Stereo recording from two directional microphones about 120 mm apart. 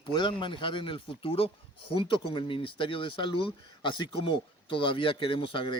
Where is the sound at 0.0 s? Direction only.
40° left (ahead or behind).